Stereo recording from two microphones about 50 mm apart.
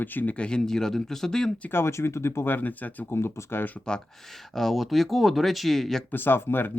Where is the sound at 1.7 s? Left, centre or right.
Left.